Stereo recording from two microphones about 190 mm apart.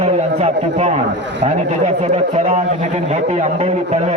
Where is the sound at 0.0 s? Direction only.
35° right (ahead or behind).